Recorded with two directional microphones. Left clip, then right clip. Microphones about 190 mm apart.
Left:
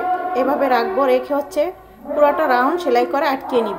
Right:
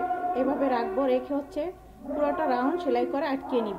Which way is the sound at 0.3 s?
10° left (ahead or behind).